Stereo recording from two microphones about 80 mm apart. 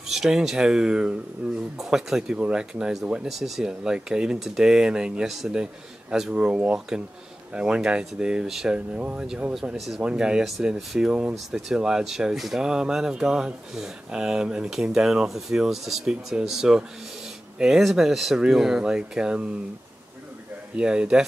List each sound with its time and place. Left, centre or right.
0.1 s speech: centre
1.8 s speech: centre
20.7 s speech: centre